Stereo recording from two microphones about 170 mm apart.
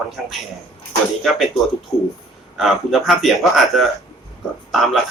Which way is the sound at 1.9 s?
20° left (ahead or behind).